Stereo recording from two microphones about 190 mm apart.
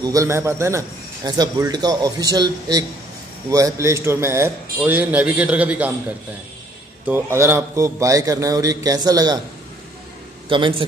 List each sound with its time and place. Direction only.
0.0 s a man's voice: 15° right (ahead or behind)
7.1 s a man's voice: 10° right (ahead or behind)
10.5 s a man's voice: 25° right (ahead or behind)